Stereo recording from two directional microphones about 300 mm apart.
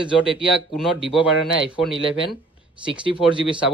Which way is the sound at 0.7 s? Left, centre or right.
Centre.